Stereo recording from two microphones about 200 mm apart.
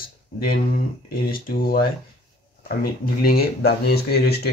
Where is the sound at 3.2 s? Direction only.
50° left (ahead or behind).